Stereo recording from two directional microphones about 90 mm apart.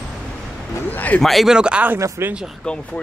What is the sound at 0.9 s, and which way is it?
Speech, 20° left (ahead or behind).